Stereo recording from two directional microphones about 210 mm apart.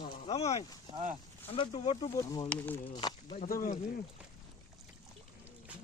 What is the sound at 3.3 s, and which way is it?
Speech, 45° left (ahead or behind).